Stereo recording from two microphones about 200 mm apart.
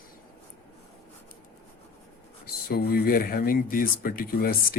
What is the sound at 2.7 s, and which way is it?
Speech, 50° left (ahead or behind).